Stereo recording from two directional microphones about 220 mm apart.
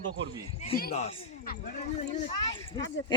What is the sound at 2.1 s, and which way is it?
Speech, 25° left (ahead or behind).